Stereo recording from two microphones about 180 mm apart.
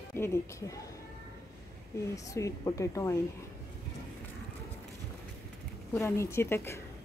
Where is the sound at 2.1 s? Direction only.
20° left (ahead or behind).